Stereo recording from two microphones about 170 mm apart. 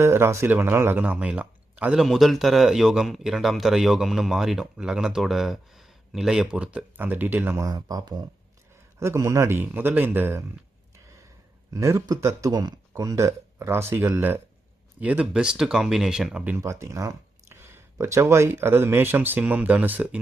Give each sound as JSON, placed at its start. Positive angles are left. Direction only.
{"t": 0.0, "sound": "speech", "side_deg": -15}
{"t": 11.7, "sound": "speech", "side_deg": -20}